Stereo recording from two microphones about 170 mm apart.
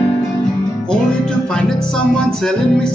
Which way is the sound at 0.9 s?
5° left (ahead or behind).